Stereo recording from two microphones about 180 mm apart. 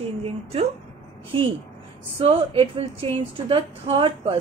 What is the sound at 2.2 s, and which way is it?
A woman's voice, 30° right (ahead or behind).